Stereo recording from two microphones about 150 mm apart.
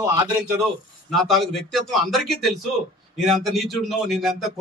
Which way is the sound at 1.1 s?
Centre (ahead or behind).